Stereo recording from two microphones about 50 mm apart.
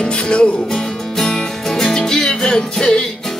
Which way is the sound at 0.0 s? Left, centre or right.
Centre.